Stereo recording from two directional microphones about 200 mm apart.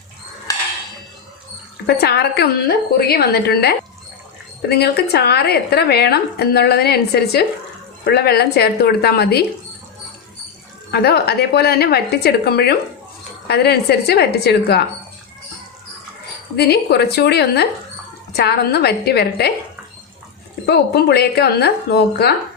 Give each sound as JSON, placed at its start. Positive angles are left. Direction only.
{"t": 0.5, "sound": "a sound", "side_deg": 20}
{"t": 1.9, "sound": "a woman's voice", "side_deg": 55}
{"t": 10.9, "sound": "a woman's voice", "side_deg": 55}
{"t": 16.6, "sound": "a woman's voice", "side_deg": 55}
{"t": 20.7, "sound": "a woman's voice", "side_deg": 55}